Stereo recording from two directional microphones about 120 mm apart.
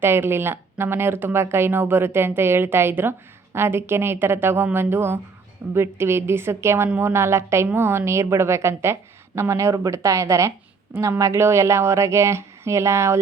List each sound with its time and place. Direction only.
0.0 s speech: 20° right (ahead or behind)